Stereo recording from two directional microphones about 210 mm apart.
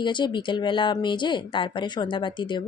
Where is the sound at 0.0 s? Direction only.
20° left (ahead or behind).